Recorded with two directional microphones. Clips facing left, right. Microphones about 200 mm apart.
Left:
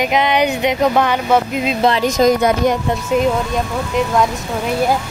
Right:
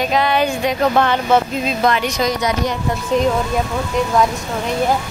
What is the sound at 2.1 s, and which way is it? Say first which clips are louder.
Speech: left 6 dB; 50° left (ahead or behind).